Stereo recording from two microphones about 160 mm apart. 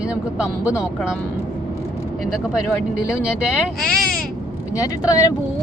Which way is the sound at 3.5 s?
5° right (ahead or behind).